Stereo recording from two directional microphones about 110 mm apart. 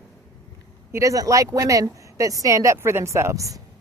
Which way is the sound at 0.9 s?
30° right (ahead or behind).